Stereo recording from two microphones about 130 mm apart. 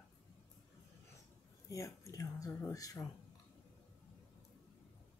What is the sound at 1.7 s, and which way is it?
Speech, 25° left (ahead or behind).